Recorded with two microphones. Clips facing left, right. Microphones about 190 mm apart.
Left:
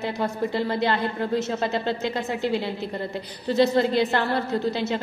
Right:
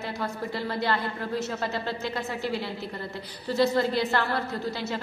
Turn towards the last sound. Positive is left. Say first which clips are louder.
# left 6 dB
turn(degrees=20)  # may be behind; listen again after turning